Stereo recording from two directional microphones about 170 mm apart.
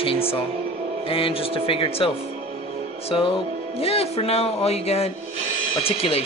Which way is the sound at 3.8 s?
35° left (ahead or behind).